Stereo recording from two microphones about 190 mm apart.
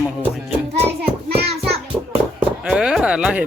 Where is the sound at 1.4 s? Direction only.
55° right (ahead or behind).